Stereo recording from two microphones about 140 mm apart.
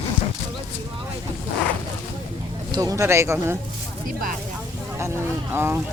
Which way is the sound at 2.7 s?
25° right (ahead or behind).